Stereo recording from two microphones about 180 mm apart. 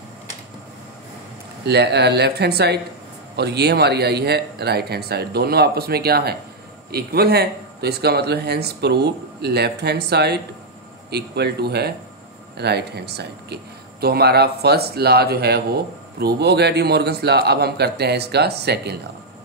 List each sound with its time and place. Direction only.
1.7 s a man's voice: 70° right (ahead or behind)